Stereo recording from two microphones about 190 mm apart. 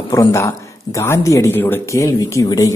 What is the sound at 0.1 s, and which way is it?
Speech, 15° left (ahead or behind).